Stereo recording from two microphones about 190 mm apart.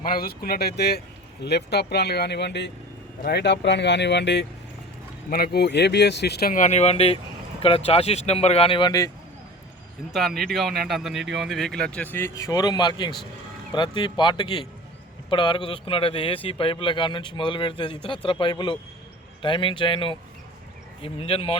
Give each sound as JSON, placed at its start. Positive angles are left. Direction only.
{"t": 0.0, "sound": "speech", "side_deg": 50}
{"t": 5.3, "sound": "speech", "side_deg": 55}
{"t": 10.1, "sound": "speech", "side_deg": 0}
{"t": 12.1, "sound": "a man's voice", "side_deg": 15}